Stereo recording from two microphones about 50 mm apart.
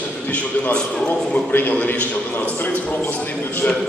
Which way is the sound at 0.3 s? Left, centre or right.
Left.